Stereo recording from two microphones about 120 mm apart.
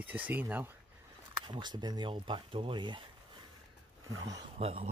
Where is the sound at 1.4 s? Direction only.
40° right (ahead or behind).